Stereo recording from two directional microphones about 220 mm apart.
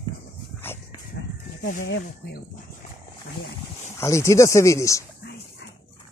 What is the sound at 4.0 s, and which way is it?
Speech, 15° left (ahead or behind).